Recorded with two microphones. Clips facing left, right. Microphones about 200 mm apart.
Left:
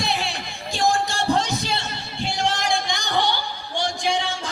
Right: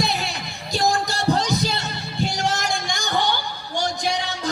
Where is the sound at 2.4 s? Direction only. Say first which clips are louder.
Left 1 dB; 45° right (ahead or behind).